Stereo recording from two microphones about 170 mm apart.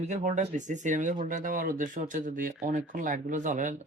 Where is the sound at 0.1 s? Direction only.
45° right (ahead or behind).